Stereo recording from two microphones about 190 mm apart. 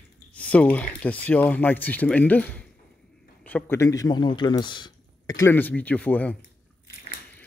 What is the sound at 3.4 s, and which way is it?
A man's voice, 10° left (ahead or behind).